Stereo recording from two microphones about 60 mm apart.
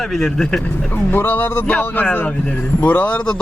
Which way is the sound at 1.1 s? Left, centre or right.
Left.